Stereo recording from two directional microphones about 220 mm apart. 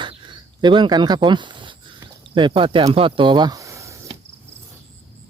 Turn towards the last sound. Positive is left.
turn(degrees=-15)  # may be behind; listen again after turning